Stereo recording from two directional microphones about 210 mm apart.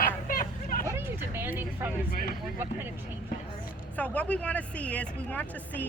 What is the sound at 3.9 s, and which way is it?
Speech, 5° left (ahead or behind).